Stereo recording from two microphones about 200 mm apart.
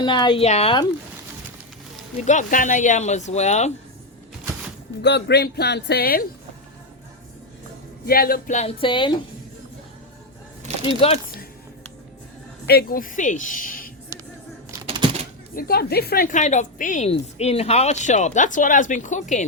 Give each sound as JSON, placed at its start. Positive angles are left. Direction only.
{"t": 0.0, "sound": "a woman's voice", "side_deg": 25}
{"t": 2.2, "sound": "a woman's voice", "side_deg": 40}
{"t": 5.0, "sound": "a woman's voice", "side_deg": 55}
{"t": 8.0, "sound": "a woman's voice", "side_deg": 50}
{"t": 10.8, "sound": "a woman's voice", "side_deg": 30}
{"t": 12.6, "sound": "a woman's voice", "side_deg": 50}
{"t": 14.8, "sound": "a sound", "side_deg": -25}
{"t": 15.5, "sound": "a woman's voice", "side_deg": 50}